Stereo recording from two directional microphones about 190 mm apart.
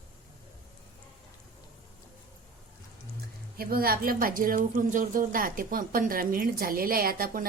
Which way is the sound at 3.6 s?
50° right (ahead or behind).